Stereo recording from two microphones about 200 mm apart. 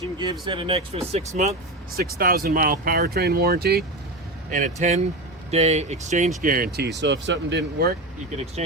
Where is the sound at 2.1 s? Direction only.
45° right (ahead or behind).